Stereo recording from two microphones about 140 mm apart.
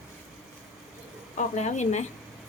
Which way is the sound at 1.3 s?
55° left (ahead or behind).